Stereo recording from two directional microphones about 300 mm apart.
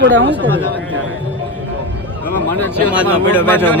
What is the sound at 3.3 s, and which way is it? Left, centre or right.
Speech, centre.